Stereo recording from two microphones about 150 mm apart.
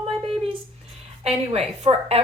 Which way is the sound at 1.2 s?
45° right (ahead or behind).